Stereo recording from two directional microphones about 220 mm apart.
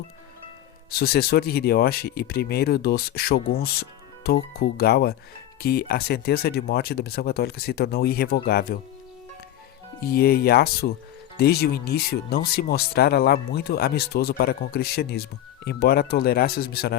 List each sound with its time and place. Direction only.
0.9 s speech: 45° left (ahead or behind)
10.0 s speech: 45° left (ahead or behind)